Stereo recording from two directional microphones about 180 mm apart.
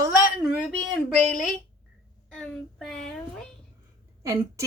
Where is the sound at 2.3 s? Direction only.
Centre (ahead or behind).